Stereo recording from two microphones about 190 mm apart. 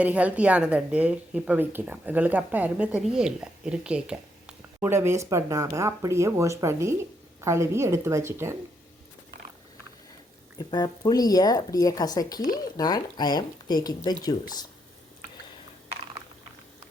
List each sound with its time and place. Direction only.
0.0 s a woman's voice: 5° right (ahead or behind)
10.6 s speech: 20° left (ahead or behind)